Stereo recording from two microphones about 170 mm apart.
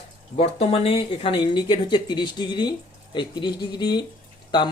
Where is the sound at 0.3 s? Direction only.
35° left (ahead or behind).